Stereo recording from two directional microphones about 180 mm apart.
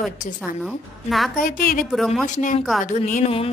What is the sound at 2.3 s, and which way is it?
A woman's voice, 45° left (ahead or behind).